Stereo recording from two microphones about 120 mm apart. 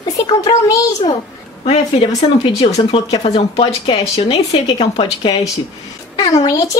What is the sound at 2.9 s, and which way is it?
Speech, 55° left (ahead or behind).